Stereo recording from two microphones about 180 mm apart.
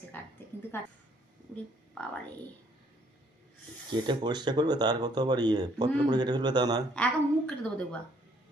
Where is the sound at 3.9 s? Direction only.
25° right (ahead or behind).